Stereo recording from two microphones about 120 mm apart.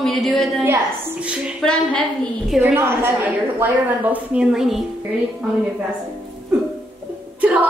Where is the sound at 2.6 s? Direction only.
20° right (ahead or behind); by 4.8 s 5° right (ahead or behind).